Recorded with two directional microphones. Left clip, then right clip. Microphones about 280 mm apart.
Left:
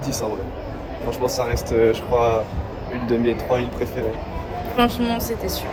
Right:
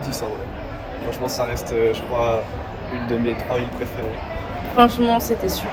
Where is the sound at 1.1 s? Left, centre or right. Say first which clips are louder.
Left 2 dB; centre.